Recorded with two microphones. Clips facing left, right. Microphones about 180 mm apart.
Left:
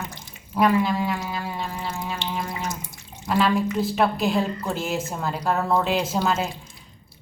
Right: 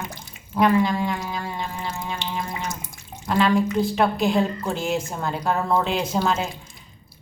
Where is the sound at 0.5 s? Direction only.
5° left (ahead or behind).